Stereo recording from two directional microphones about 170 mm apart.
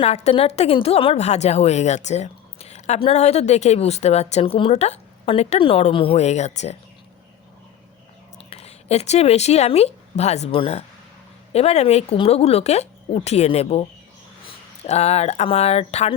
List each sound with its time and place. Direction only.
0.0 s a woman's voice: 35° left (ahead or behind)
8.4 s a woman's voice: 35° left (ahead or behind)